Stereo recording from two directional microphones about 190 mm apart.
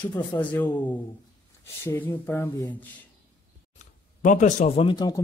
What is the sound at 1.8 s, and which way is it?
Speech, 10° left (ahead or behind).